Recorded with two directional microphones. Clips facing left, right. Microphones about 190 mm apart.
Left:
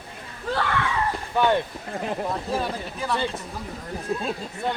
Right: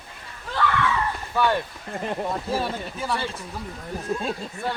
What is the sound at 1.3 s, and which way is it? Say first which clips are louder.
Speech: left 2 dB; 20° left (ahead or behind).